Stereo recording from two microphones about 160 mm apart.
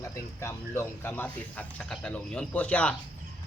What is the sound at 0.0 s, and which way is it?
Speech, 15° left (ahead or behind).